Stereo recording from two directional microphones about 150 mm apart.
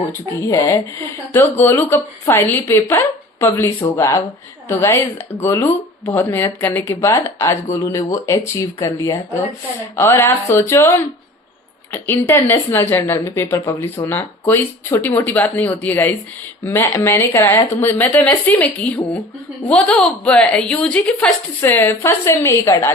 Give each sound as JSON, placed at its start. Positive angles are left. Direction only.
{"t": 0.1, "sound": "speech", "side_deg": 20}